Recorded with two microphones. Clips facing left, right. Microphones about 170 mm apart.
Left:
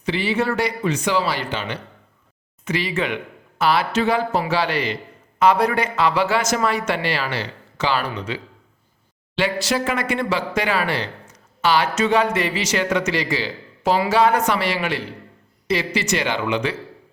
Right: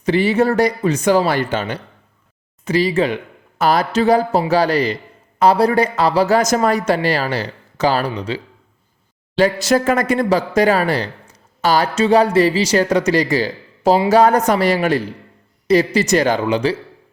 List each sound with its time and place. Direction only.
0.0 s speech: 45° right (ahead or behind)